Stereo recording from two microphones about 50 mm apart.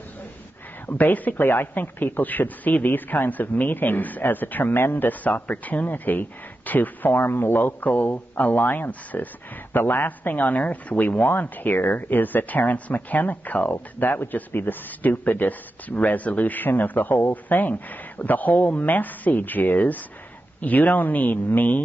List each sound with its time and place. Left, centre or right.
0.8 s speech: left
1.4 s speech: left
10.3 s speech: left
11.2 s speech: left